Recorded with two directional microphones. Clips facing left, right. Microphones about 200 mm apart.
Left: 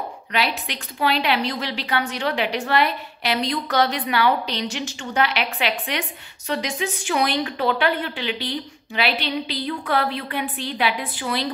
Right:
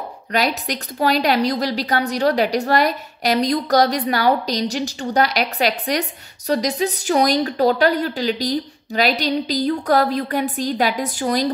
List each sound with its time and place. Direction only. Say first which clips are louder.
0.3 s a woman's voice: right 5 dB; 40° right (ahead or behind)